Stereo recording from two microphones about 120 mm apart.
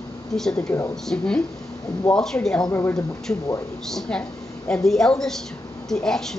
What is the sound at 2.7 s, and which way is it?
Speech, 20° left (ahead or behind).